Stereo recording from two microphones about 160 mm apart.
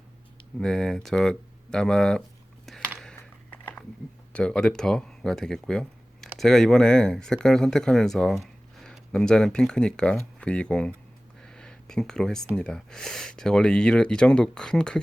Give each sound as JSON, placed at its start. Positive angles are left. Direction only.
{"t": 0.6, "sound": "speech", "side_deg": 5}
{"t": 4.3, "sound": "speech", "side_deg": 5}
{"t": 11.4, "sound": "a sound", "side_deg": 5}
{"t": 12.5, "sound": "speech", "side_deg": 5}